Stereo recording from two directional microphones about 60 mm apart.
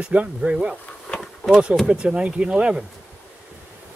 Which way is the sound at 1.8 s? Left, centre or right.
Centre.